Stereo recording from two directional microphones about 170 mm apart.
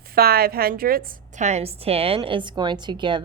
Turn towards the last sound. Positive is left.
turn(degrees=-25)  # may be behind; listen again after turning